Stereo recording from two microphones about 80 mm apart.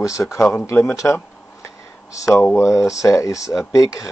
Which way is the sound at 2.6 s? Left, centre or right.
Left.